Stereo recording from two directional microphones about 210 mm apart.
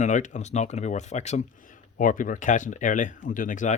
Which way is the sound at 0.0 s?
35° left (ahead or behind).